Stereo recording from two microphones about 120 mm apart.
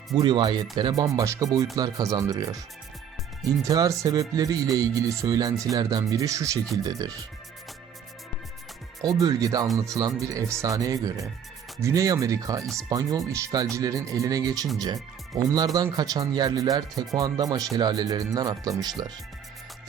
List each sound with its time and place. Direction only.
0.1 s speech: 40° right (ahead or behind)
1.0 s speech: 25° right (ahead or behind)
9.0 s speech: 30° right (ahead or behind)